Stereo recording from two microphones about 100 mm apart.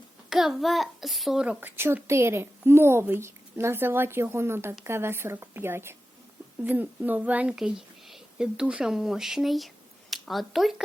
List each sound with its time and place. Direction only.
0.3 s a child's voice: 5° right (ahead or behind)
1.6 s a woman's voice: 25° right (ahead or behind); by 10.8 s centre (ahead or behind)